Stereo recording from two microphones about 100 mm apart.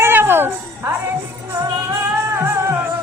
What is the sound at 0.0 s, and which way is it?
Music, 20° right (ahead or behind).